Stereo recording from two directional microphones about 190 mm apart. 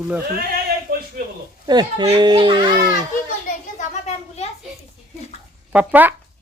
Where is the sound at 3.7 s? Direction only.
35° left (ahead or behind).